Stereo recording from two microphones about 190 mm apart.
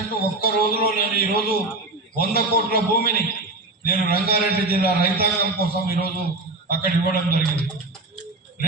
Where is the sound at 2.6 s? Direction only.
50° right (ahead or behind).